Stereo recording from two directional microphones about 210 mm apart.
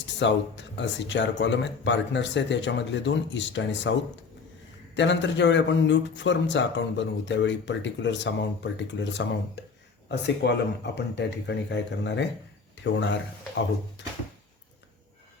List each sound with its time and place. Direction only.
0.0 s a man's voice: 60° left (ahead or behind)
4.9 s a man's voice: 60° left (ahead or behind)
14.0 s a sound: 60° left (ahead or behind)